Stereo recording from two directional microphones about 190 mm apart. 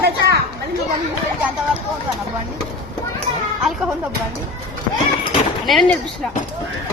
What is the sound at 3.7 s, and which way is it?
Speech, centre (ahead or behind).